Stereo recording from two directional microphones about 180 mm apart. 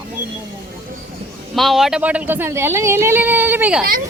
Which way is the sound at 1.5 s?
Centre (ahead or behind).